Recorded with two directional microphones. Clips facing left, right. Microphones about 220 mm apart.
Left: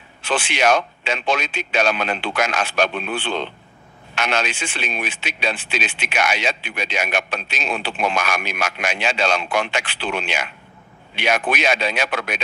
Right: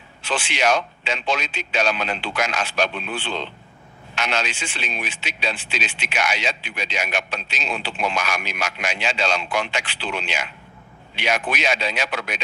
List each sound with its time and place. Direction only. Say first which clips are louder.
0.2 s a man's voice: left 3 dB; 55° left (ahead or behind)